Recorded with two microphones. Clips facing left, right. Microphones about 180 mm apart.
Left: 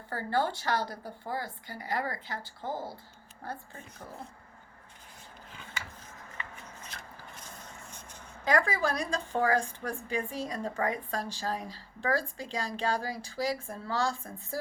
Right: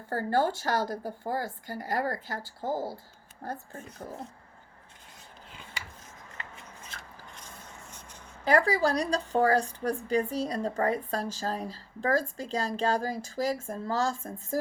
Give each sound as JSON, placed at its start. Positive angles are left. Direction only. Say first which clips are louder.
{"t": 0.1, "sound": "speech", "louder": "right 4 dB", "side_deg": -45}
{"t": 8.4, "sound": "speech", "louder": "right 4 dB", "side_deg": -35}